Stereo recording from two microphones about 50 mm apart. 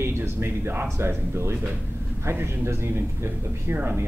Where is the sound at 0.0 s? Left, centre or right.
Right.